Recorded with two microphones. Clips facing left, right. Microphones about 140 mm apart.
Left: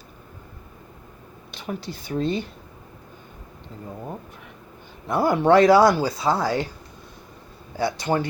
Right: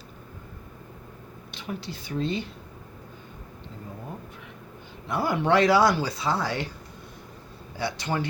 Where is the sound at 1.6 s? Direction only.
45° left (ahead or behind).